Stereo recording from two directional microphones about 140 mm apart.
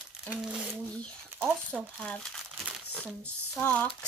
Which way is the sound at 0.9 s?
10° left (ahead or behind).